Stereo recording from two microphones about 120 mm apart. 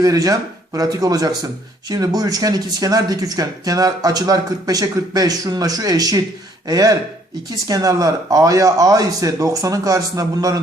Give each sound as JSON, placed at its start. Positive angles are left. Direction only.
{"t": 0.0, "sound": "speech", "side_deg": -30}